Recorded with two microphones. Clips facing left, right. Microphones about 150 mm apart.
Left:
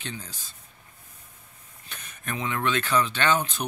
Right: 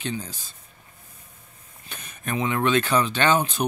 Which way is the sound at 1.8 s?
15° right (ahead or behind).